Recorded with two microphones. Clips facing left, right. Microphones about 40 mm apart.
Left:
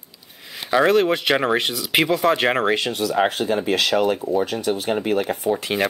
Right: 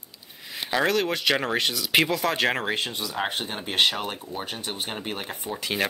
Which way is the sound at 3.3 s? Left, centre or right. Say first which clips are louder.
Left 10 dB; left.